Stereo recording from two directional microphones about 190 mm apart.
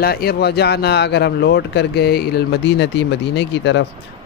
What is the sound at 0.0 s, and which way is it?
A man's voice, 55° left (ahead or behind).